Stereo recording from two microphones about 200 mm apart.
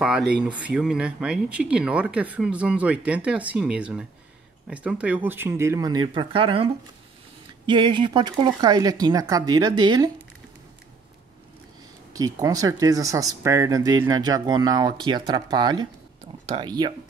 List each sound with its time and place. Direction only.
0.0 s speech: 5° right (ahead or behind); by 10.1 s 20° right (ahead or behind)
12.1 s speech: 15° right (ahead or behind)